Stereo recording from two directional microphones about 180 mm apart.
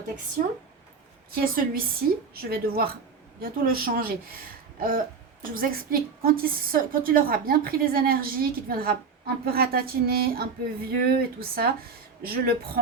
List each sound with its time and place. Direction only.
1.4 s a woman's voice: 55° right (ahead or behind)